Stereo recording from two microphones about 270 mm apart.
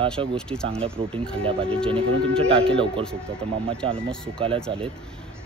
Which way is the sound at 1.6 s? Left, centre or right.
Centre.